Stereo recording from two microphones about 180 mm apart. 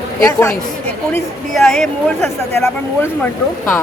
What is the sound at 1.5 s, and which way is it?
Speech, centre (ahead or behind).